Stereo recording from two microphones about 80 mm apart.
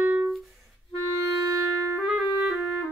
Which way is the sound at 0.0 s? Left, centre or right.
Right.